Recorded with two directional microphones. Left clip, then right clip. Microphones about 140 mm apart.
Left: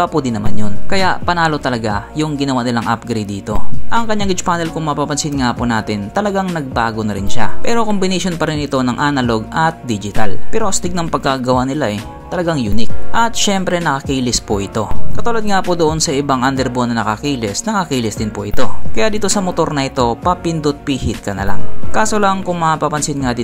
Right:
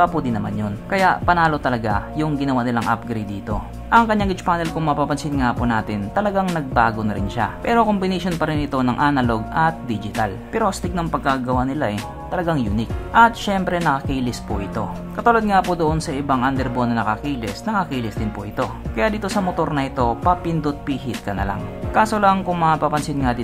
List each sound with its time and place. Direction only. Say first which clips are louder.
0.0 s speech: left 2 dB; 30° left (ahead or behind)
11.2 s speech: left 6 dB; 45° left (ahead or behind); by 14.3 s 25° left (ahead or behind)
14.6 s speech: left 6 dB; 40° left (ahead or behind)
16.1 s speech: left 5 dB; 40° left (ahead or behind)